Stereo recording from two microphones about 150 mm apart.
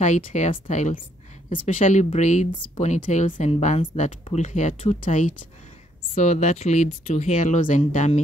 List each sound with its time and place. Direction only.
0.0 s speech: 55° left (ahead or behind)